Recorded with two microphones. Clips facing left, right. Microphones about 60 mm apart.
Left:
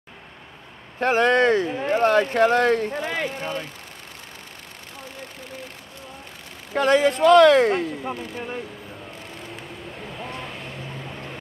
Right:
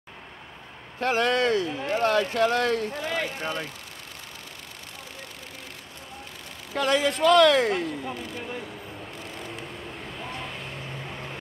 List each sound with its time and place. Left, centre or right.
1.0 s speech: left
6.7 s speech: left
10.2 s vehicle: centre